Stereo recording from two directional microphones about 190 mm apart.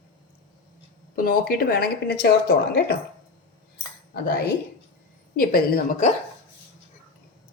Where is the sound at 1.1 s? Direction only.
50° left (ahead or behind).